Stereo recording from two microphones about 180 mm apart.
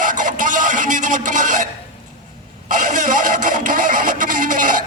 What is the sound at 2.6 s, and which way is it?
Vehicle, 45° right (ahead or behind).